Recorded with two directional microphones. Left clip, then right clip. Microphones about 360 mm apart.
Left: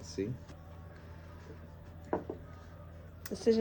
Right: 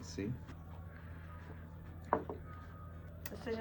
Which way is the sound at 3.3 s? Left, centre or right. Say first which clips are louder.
Left 13 dB; centre.